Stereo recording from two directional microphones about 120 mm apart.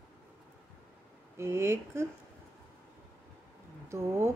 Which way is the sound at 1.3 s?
20° right (ahead or behind).